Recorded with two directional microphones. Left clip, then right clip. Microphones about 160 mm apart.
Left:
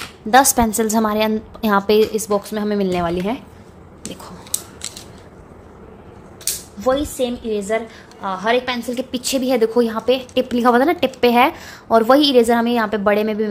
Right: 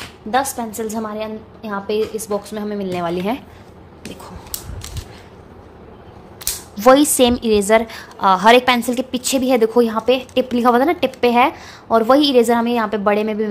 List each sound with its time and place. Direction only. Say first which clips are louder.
0.3 s a woman's voice: left 7 dB; 35° left (ahead or behind)
2.0 s a woman's voice: left 4 dB; 25° left (ahead or behind)
3.1 s a woman's voice: right 1 dB; centre (ahead or behind)
6.8 s a woman's voice: right 8 dB; 40° right (ahead or behind)
8.9 s a woman's voice: right 2 dB; 10° right (ahead or behind)